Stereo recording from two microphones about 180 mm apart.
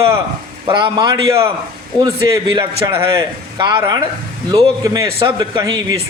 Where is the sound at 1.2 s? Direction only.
15° right (ahead or behind).